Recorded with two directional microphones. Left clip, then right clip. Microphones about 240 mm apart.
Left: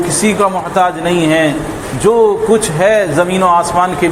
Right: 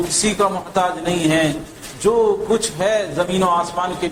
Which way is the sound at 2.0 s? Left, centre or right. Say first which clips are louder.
Left 6 dB; left.